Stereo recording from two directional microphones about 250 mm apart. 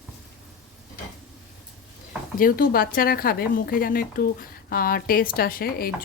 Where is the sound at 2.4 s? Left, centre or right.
Left.